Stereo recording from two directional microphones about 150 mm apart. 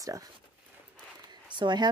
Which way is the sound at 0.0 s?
20° right (ahead or behind).